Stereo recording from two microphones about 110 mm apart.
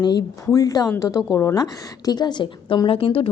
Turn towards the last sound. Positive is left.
turn(degrees=55)  # may be behind; listen again after turning